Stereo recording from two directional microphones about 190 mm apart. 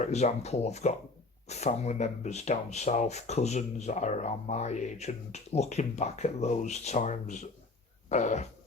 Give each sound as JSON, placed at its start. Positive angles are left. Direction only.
{"t": 0.0, "sound": "speech", "side_deg": 35}